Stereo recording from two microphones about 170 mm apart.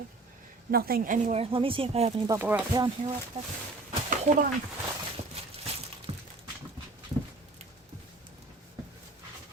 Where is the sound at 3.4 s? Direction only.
35° right (ahead or behind).